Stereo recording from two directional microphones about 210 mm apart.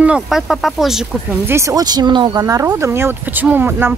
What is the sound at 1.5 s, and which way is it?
Speech, 15° right (ahead or behind).